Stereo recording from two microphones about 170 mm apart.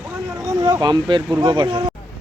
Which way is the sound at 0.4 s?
20° right (ahead or behind).